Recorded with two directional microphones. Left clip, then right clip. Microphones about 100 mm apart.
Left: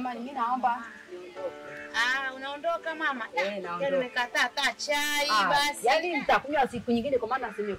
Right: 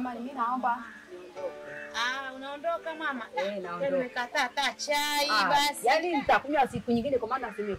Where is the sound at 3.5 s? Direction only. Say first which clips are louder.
Left 1 dB; 10° left (ahead or behind).